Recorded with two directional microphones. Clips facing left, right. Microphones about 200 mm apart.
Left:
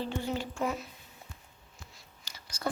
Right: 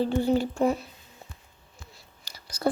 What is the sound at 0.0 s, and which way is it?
Speech, 35° right (ahead or behind).